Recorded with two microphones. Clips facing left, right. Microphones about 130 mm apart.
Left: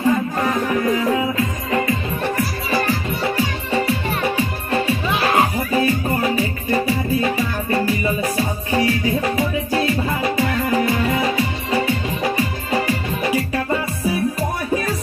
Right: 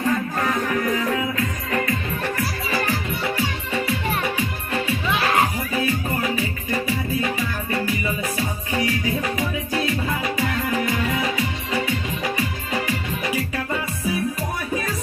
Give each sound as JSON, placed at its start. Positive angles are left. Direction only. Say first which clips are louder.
{"t": 0.0, "sound": "music", "louder": "left 4 dB", "side_deg": 25}